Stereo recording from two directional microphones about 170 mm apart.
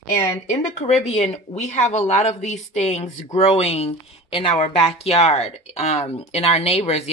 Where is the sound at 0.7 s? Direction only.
40° left (ahead or behind).